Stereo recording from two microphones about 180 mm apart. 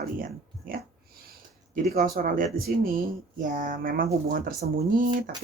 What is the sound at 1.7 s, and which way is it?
Speech, 50° right (ahead or behind).